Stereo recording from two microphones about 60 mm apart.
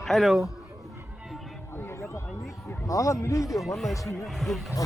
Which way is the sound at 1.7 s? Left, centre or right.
Left.